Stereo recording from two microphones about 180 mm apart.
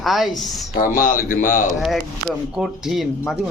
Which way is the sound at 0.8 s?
50° left (ahead or behind).